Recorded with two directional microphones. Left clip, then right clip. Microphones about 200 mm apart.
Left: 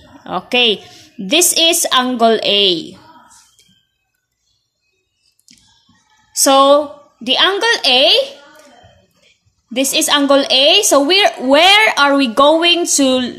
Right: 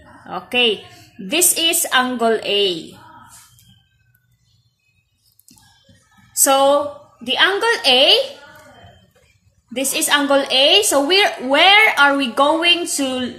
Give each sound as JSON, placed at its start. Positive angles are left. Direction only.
{"t": 0.2, "sound": "a woman's voice", "side_deg": 40}
{"t": 6.4, "sound": "a woman's voice", "side_deg": 35}
{"t": 9.7, "sound": "a woman's voice", "side_deg": 40}